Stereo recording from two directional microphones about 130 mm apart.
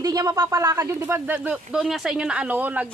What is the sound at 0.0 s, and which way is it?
Speech, 30° right (ahead or behind).